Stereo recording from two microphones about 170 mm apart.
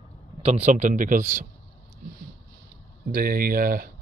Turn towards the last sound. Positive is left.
turn(degrees=-55)  # may be behind; listen again after turning